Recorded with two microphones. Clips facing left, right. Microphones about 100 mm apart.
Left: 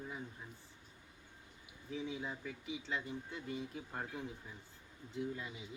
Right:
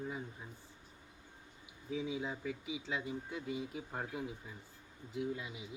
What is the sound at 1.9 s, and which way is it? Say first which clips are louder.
Speech: right 3 dB; 15° right (ahead or behind).